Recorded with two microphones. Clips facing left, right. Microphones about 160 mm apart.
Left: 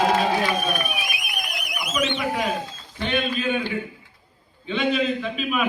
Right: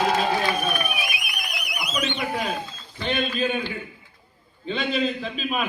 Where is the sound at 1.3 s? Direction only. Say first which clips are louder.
Left 2 dB; 50° left (ahead or behind).